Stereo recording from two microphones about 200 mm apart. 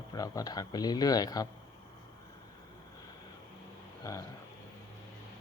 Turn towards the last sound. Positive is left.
turn(degrees=15)  # may be behind; listen again after turning